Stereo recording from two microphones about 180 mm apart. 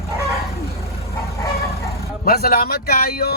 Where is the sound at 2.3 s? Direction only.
55° left (ahead or behind).